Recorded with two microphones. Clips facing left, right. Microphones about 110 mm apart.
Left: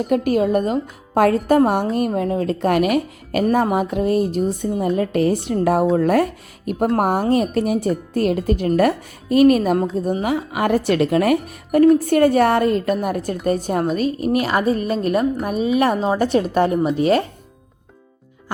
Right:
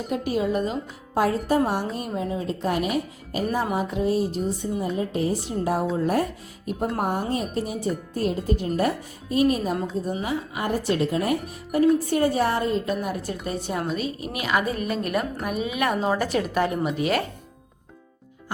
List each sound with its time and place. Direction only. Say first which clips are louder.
0.1 s speech: left 7 dB; 55° left (ahead or behind)
3.5 s speech: left 7 dB; 60° left (ahead or behind)
4.9 s a woman's voice: left 7 dB; 70° left (ahead or behind); by 17.2 s 30° left (ahead or behind)